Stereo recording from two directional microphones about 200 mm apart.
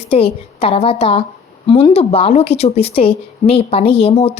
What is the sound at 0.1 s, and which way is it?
Speech, 30° left (ahead or behind).